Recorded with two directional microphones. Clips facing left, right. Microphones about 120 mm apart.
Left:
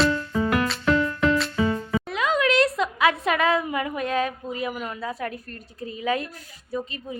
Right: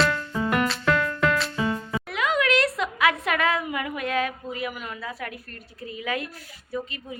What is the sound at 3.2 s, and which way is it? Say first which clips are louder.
A woman's voice: left 3 dB; 20° left (ahead or behind).